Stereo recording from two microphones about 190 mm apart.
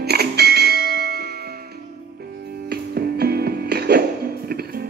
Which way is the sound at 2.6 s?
55° right (ahead or behind).